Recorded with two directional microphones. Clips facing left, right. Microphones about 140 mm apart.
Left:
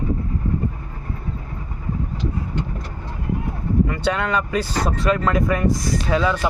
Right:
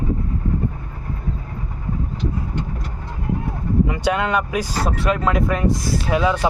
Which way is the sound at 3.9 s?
10° right (ahead or behind).